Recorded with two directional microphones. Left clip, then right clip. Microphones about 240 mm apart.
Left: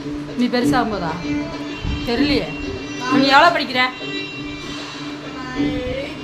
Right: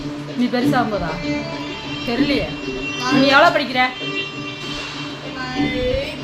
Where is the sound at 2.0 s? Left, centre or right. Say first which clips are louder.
Left 1 dB; centre.